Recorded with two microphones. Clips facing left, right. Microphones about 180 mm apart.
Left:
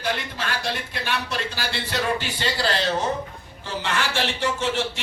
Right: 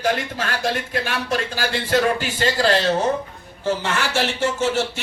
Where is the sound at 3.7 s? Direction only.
45° right (ahead or behind).